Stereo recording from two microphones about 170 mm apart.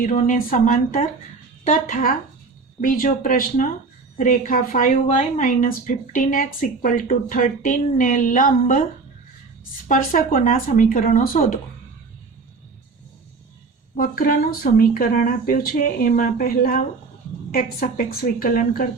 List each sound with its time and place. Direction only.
0.0 s a woman's voice: 55° left (ahead or behind)
9.9 s a woman's voice: 55° left (ahead or behind)
13.9 s speech: 55° left (ahead or behind)